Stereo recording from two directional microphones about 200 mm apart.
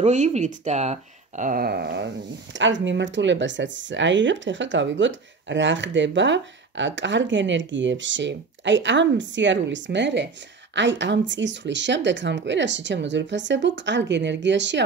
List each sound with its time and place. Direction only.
0.0 s speech: 35° right (ahead or behind); by 2.0 s 55° right (ahead or behind)
2.5 s speech: 65° right (ahead or behind)